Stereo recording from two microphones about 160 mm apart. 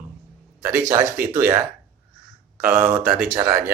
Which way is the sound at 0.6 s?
15° right (ahead or behind).